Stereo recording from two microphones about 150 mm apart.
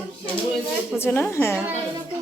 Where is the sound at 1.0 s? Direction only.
15° left (ahead or behind).